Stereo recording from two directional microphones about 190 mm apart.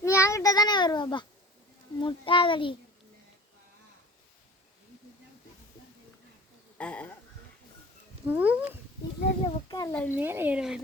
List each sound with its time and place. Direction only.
0.0 s child singing: 15° left (ahead or behind)
2.0 s a sound: 25° left (ahead or behind)
6.7 s speech: 5° left (ahead or behind)
8.3 s speech: 10° right (ahead or behind)
9.4 s a child's voice: 20° left (ahead or behind)
10.2 s speech: 10° right (ahead or behind)